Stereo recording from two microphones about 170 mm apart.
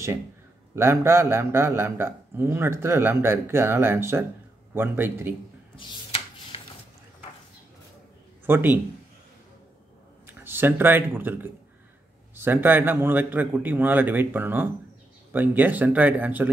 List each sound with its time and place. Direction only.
0.7 s a man's voice: 15° right (ahead or behind)
5.8 s a sound: 30° left (ahead or behind)
8.5 s a man's voice: 10° right (ahead or behind)
10.2 s a man's voice: 15° right (ahead or behind)